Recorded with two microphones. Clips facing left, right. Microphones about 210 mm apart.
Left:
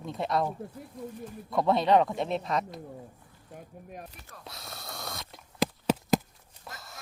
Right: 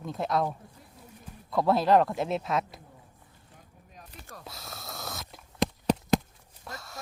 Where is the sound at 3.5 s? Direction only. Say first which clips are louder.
Left 11 dB; 60° left (ahead or behind).